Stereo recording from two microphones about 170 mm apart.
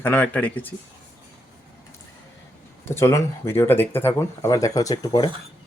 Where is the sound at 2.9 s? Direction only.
15° left (ahead or behind).